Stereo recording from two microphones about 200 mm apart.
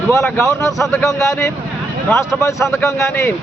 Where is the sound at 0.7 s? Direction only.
Centre (ahead or behind).